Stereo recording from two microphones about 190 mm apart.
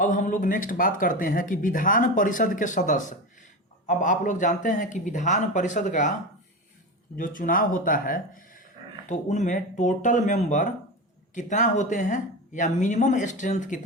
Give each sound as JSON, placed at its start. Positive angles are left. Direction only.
{"t": 0.0, "sound": "speech", "side_deg": 45}
{"t": 7.2, "sound": "speech", "side_deg": 45}